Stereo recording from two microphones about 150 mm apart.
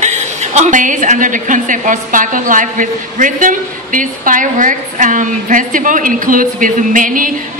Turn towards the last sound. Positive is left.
turn(degrees=-65)  # may be behind; listen again after turning